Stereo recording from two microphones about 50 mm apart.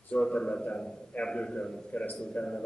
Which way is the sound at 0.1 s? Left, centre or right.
Centre.